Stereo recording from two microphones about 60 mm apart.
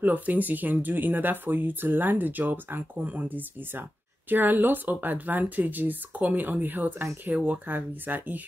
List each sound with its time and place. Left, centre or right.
0.0 s speech: right